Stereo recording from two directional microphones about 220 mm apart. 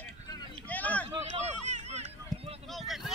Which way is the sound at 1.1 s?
30° right (ahead or behind).